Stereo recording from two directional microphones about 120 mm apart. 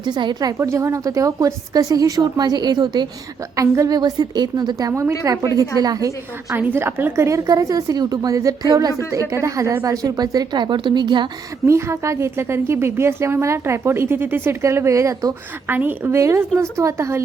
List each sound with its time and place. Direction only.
0.0 s a woman's voice: 40° right (ahead or behind)
11.6 s a woman's voice: 25° right (ahead or behind)
15.6 s a woman's voice: 15° right (ahead or behind)